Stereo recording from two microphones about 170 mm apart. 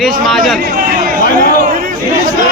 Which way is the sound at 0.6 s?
60° right (ahead or behind).